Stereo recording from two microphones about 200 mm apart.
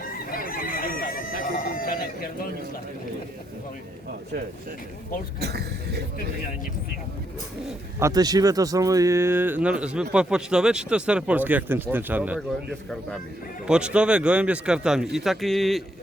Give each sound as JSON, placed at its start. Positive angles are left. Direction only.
{"t": 0.3, "sound": "crowing", "side_deg": 45}
{"t": 5.4, "sound": "speech", "side_deg": -55}
{"t": 7.9, "sound": "speech", "side_deg": -15}
{"t": 13.7, "sound": "speech", "side_deg": -5}